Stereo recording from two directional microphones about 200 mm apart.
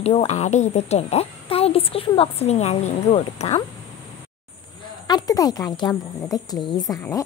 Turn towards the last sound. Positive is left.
turn(degrees=15)  # may be behind; listen again after turning